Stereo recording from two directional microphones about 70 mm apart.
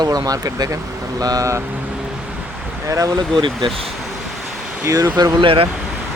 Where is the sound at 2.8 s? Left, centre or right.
Right.